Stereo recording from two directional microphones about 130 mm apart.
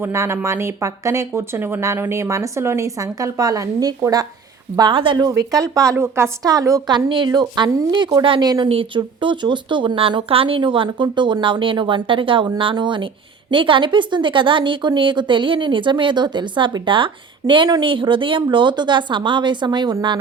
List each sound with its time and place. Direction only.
0.0 s speech: 20° right (ahead or behind)
4.8 s speech: 40° right (ahead or behind)